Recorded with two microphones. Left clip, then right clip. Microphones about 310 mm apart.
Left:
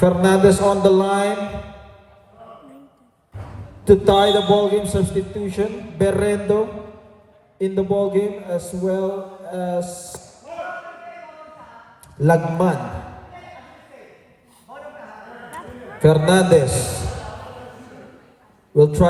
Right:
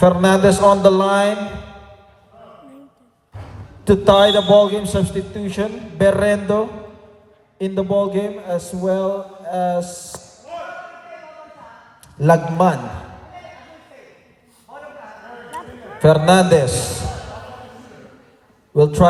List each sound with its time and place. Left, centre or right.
0.0 s mantra: centre
3.8 s mantra: centre
12.2 s mantra: centre
16.0 s mantra: centre
18.8 s mantra: centre